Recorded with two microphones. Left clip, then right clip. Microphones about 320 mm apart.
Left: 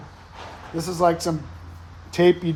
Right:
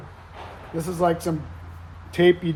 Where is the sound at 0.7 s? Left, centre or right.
Centre.